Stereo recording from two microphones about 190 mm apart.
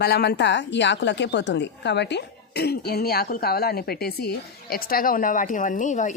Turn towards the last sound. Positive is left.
turn(degrees=40)  # may be behind; listen again after turning